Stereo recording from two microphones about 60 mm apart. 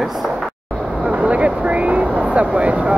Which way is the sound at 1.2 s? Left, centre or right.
Centre.